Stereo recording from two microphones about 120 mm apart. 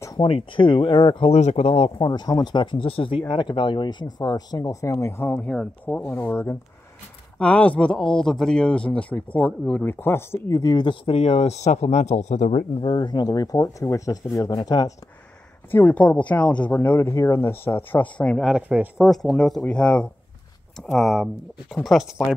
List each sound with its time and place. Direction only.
0.2 s speech: 50° left (ahead or behind)
1.3 s speech: 70° left (ahead or behind)
2.0 s speech: 35° left (ahead or behind); by 6.1 s 10° left (ahead or behind)
6.1 s speech: 20° left (ahead or behind)
7.3 s speech: 10° left (ahead or behind); by 11.0 s 35° left (ahead or behind)
11.1 s speech: 55° left (ahead or behind); by 12.6 s 80° left
12.8 s speech: 40° left (ahead or behind)
15.7 s speech: 15° left (ahead or behind)
18.5 s speech: 15° right (ahead or behind)
18.9 s speech: 5° left (ahead or behind)